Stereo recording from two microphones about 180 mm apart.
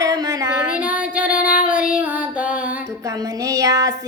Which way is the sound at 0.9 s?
5° right (ahead or behind).